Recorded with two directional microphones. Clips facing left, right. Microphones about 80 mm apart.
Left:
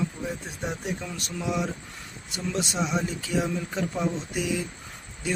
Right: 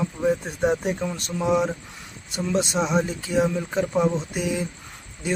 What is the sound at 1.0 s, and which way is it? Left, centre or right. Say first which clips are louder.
A man's voice: right 7 dB; right.